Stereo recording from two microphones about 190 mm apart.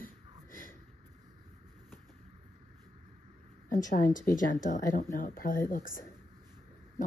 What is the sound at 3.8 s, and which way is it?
Speech, 45° left (ahead or behind).